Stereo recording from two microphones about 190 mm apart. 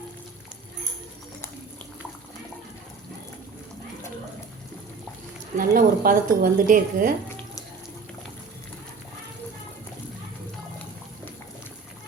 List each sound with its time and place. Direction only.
5.5 s a woman's voice: 45° right (ahead or behind)